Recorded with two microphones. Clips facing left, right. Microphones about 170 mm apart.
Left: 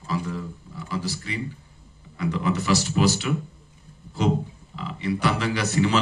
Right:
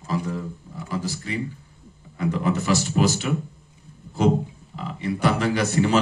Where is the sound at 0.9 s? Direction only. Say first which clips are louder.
Right 2 dB; 45° right (ahead or behind).